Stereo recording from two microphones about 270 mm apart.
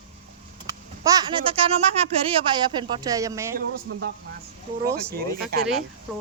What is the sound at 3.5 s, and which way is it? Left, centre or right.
Speech, right.